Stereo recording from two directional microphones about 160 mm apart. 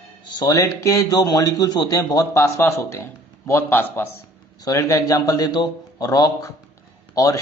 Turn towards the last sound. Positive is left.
turn(degrees=20)  # may be behind; listen again after turning